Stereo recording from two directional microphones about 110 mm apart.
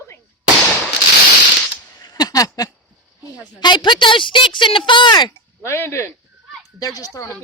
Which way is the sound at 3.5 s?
45° left (ahead or behind).